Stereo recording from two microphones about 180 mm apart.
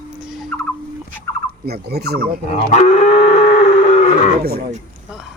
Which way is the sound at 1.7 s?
65° right (ahead or behind).